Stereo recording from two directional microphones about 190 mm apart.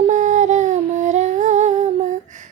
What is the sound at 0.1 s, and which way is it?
Humming, 40° right (ahead or behind).